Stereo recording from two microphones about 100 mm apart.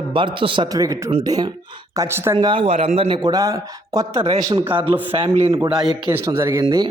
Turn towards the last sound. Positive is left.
turn(degrees=-35)  # may be behind; listen again after turning